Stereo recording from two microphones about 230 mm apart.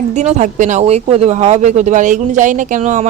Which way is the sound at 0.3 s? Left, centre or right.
Right.